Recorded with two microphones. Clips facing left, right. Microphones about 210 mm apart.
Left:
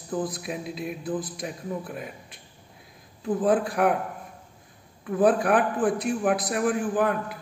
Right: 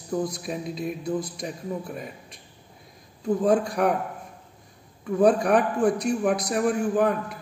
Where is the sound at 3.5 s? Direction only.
5° left (ahead or behind).